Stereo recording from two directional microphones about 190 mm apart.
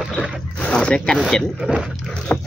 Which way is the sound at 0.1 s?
5° left (ahead or behind).